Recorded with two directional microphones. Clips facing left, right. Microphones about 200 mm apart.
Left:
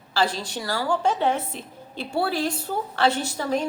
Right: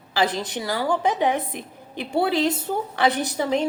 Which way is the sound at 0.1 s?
20° right (ahead or behind).